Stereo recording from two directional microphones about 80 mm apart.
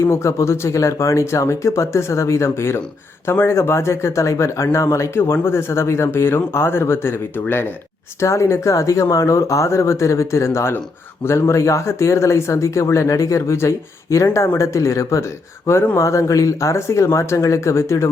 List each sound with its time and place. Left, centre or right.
0.0 s speech: left
8.2 s speech: left